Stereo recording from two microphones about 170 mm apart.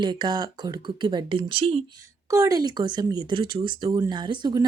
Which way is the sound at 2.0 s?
20° right (ahead or behind).